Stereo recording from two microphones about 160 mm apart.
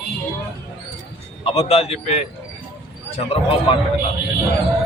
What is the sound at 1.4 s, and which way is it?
A man's voice, 40° left (ahead or behind).